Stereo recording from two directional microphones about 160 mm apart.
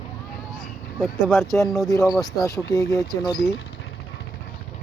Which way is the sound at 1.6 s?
Centre (ahead or behind).